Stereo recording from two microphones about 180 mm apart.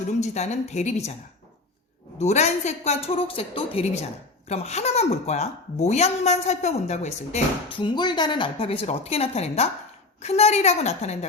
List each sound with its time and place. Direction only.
0.0 s a woman's voice: 40° left (ahead or behind)
2.1 s a woman's voice: 40° left (ahead or behind)
7.9 s a woman's voice: 25° left (ahead or behind)